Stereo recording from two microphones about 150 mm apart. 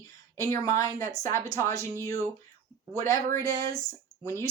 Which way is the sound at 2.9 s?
20° left (ahead or behind).